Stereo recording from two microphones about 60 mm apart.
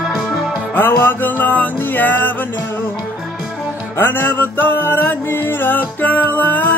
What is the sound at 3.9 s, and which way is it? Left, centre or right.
Music, left.